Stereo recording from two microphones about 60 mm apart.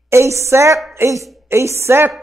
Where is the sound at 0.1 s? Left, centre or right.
Right.